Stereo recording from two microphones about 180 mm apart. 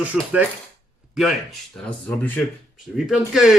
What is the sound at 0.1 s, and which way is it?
Speech, 5° right (ahead or behind).